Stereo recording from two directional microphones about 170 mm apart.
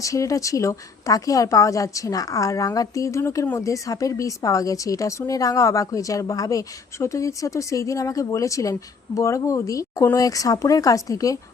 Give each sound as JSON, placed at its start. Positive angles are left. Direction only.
{"t": 0.0, "sound": "a woman's voice", "side_deg": 20}